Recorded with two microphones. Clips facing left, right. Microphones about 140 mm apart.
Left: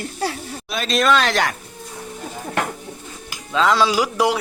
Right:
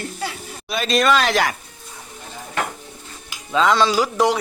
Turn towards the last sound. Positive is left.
turn(degrees=10)  # may be behind; listen again after turning